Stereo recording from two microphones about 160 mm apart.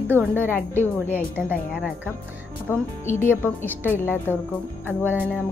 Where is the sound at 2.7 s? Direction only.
10° left (ahead or behind).